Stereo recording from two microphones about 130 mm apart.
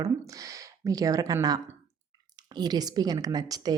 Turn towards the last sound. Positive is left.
turn(degrees=-30)  # may be behind; listen again after turning